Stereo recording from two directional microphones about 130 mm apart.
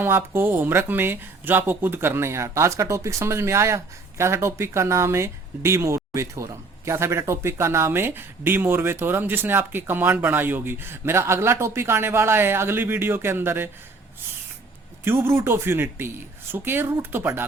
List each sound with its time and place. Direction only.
0.0 s speech: 15° right (ahead or behind)
15.0 s speech: 20° right (ahead or behind)